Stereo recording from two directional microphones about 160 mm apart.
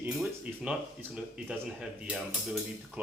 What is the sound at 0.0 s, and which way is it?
Speech, 5° right (ahead or behind).